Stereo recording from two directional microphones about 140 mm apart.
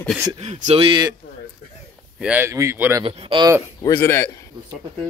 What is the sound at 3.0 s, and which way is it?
Speech, 35° right (ahead or behind).